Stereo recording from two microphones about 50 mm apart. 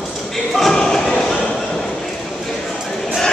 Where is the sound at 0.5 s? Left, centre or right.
Centre.